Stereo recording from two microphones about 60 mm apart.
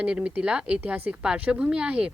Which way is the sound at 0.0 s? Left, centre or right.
Centre.